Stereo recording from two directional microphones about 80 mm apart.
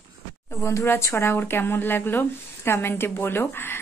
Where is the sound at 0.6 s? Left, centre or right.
Left.